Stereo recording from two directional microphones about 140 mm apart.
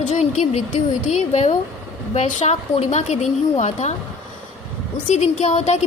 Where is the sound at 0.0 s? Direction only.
55° left (ahead or behind).